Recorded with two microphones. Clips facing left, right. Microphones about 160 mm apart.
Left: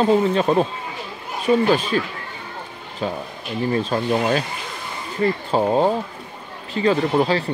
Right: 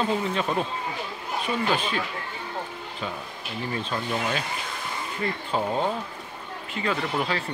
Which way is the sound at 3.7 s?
40° left (ahead or behind).